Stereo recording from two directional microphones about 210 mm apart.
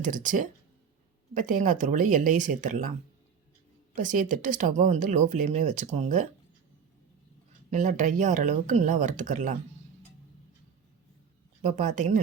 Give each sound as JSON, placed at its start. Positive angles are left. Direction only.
{"t": 0.0, "sound": "speech", "side_deg": -40}
{"t": 3.9, "sound": "speech", "side_deg": -40}
{"t": 7.7, "sound": "speech", "side_deg": -35}
{"t": 11.6, "sound": "speech", "side_deg": -35}